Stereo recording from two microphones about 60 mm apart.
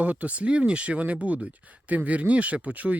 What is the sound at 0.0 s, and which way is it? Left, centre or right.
Speech, right.